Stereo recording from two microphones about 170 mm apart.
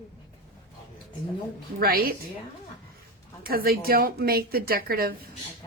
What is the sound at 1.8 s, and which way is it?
Speech, 60° right (ahead or behind).